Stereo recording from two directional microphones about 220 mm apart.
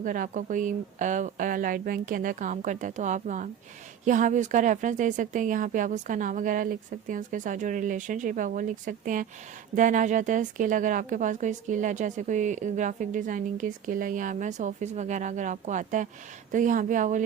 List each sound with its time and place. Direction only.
0.0 s speech: 35° right (ahead or behind)